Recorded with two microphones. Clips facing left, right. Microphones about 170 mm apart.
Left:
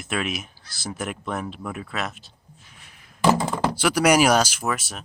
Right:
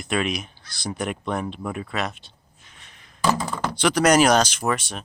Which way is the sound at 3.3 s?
25° left (ahead or behind).